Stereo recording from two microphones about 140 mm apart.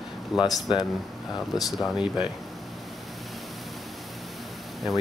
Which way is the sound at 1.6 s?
Centre (ahead or behind).